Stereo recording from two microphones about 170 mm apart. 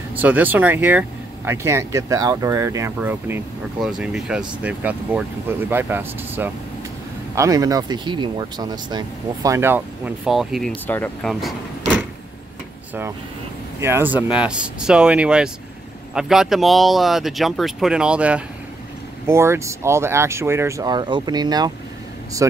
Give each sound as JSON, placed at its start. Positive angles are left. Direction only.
{"t": 0.2, "sound": "speech", "side_deg": -10}
{"t": 10.9, "sound": "speech", "side_deg": 10}
{"t": 13.7, "sound": "speech", "side_deg": -15}